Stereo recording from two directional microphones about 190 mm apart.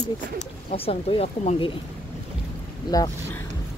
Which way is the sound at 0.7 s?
30° left (ahead or behind).